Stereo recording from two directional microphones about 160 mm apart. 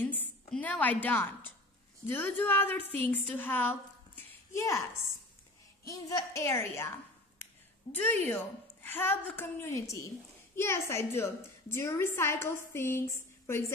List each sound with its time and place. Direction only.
0.0 s a sound: 10° left (ahead or behind)
2.0 s a woman's voice: 10° left (ahead or behind)
5.9 s a woman's voice: 20° left (ahead or behind)
7.9 s a woman's voice: 10° left (ahead or behind)